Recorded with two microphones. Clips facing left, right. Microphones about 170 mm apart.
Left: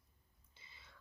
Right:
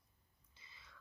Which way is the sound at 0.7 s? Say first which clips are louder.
Left 1 dB; 30° left (ahead or behind).